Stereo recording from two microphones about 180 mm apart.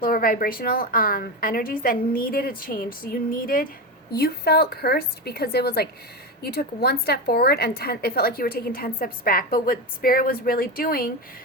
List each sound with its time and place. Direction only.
0.0 s a woman's voice: 55° left (ahead or behind)